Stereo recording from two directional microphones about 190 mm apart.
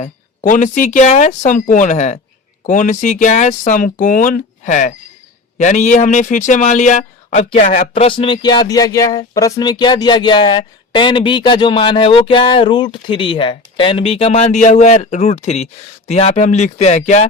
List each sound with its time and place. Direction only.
0.0 s speech: 40° left (ahead or behind)
7.9 s speech: 30° left (ahead or behind)